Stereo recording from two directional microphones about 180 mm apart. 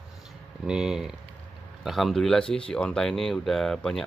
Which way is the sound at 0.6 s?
5° right (ahead or behind).